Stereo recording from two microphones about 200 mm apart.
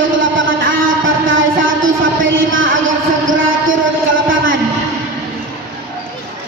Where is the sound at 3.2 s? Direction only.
75° right (ahead or behind).